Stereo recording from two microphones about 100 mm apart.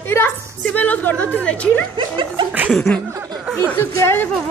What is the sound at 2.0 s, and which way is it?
Chuckle, 55° right (ahead or behind).